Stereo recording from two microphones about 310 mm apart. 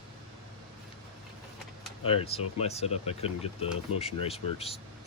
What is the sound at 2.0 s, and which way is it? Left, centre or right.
Speech, centre.